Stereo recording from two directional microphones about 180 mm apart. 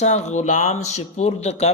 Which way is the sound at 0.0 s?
40° left (ahead or behind).